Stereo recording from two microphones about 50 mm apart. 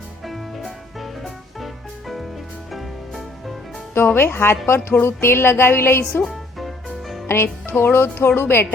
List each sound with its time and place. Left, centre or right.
0.3 s music: centre
3.9 s a woman's voice: left
5.0 s music: left
6.2 s music: centre
7.3 s music: left
7.9 s a woman's voice: left